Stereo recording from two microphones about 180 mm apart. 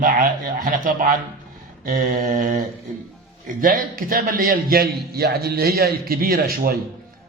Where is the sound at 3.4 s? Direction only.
50° right (ahead or behind).